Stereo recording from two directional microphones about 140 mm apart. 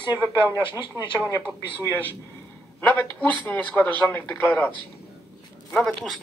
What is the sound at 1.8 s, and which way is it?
A man's voice, 10° left (ahead or behind).